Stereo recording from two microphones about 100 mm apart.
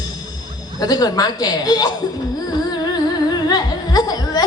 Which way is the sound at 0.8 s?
40° left (ahead or behind).